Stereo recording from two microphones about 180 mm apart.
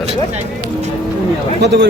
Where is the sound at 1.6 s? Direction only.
65° right (ahead or behind).